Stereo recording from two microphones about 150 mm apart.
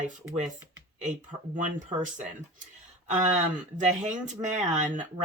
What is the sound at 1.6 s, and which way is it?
Speech, 55° right (ahead or behind).